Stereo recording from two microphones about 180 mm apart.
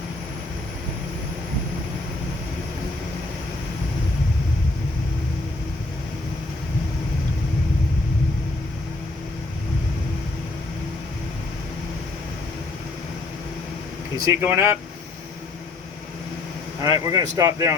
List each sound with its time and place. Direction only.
14.3 s speech: 15° right (ahead or behind)
16.8 s speech: 20° right (ahead or behind)